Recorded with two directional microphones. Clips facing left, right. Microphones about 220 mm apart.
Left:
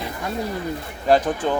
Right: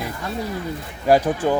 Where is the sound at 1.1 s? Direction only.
10° right (ahead or behind).